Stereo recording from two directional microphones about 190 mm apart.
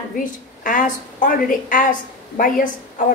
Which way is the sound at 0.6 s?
45° left (ahead or behind).